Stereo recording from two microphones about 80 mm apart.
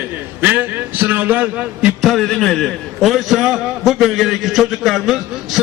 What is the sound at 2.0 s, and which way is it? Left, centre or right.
A man's voice, centre.